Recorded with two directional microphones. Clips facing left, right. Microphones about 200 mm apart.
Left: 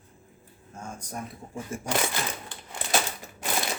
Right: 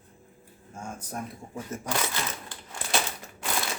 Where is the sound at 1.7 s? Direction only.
10° left (ahead or behind).